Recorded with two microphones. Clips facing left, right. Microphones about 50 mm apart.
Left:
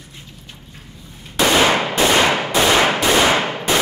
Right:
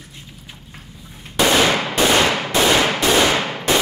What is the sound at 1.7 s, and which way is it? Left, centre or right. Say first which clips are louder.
Gunshot: left 1 dB; centre.